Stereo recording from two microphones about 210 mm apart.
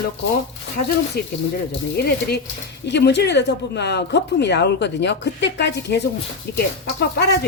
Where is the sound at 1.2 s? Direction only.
50° left (ahead or behind).